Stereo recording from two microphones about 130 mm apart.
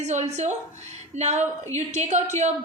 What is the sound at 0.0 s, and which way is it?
A woman's voice, 60° right (ahead or behind).